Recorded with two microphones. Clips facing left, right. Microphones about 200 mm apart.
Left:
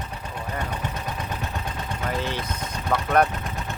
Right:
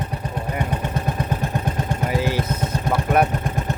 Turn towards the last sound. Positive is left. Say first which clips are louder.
# right 2 dB
turn(degrees=-10)  # may be behind; listen again after turning